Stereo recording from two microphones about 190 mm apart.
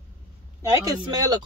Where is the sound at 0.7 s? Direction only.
20° right (ahead or behind).